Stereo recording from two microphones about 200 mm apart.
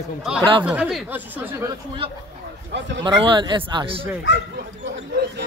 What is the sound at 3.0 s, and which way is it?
Speech, 25° right (ahead or behind).